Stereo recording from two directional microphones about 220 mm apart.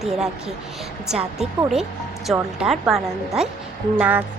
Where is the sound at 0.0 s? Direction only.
Centre (ahead or behind).